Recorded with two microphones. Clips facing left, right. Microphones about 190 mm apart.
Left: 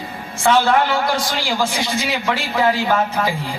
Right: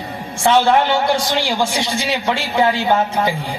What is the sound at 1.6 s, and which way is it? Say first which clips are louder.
A man's voice: right 1 dB; 30° right (ahead or behind).